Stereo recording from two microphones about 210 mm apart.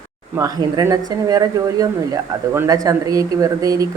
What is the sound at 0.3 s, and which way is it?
Speech, 15° right (ahead or behind).